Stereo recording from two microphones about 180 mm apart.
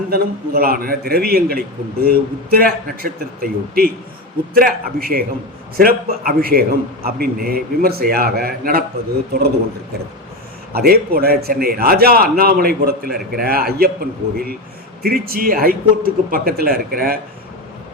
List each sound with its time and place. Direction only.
0.1 s a man's voice: 55° right (ahead or behind)
10.8 s a man's voice: 60° right (ahead or behind)